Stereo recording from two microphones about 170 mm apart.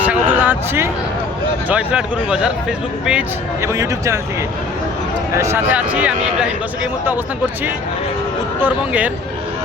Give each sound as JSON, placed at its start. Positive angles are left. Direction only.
{"t": 0.0, "sound": "a sound", "side_deg": -10}
{"t": 1.7, "sound": "speech", "side_deg": -5}
{"t": 3.6, "sound": "speech", "side_deg": -15}
{"t": 5.4, "sound": "speech", "side_deg": -10}
{"t": 8.6, "sound": "speech", "side_deg": -10}